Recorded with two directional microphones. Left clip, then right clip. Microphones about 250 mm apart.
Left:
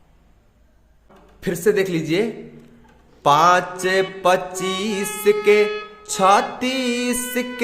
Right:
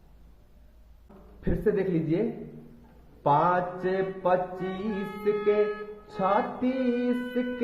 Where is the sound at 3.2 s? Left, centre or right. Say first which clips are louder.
Left 9 dB; left.